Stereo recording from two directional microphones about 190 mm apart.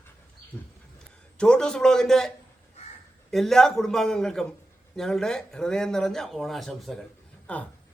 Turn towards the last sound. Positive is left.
turn(degrees=5)  # may be behind; listen again after turning